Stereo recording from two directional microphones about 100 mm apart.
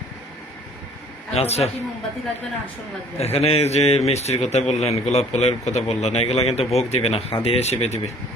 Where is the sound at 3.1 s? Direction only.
90° left.